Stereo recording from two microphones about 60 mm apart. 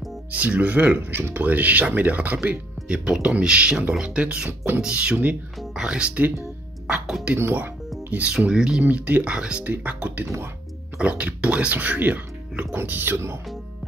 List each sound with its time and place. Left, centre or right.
0.3 s speech: right
4.5 s speech: right
4.8 s speech: centre
6.9 s speech: centre
8.1 s speech: right
8.8 s speech: right